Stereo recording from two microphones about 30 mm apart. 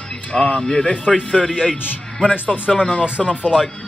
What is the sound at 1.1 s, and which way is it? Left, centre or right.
Speech, centre.